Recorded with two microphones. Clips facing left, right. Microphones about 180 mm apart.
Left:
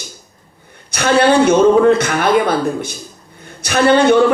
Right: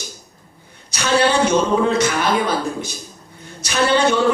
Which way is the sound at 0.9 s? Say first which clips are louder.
Left 5 dB; 55° left (ahead or behind).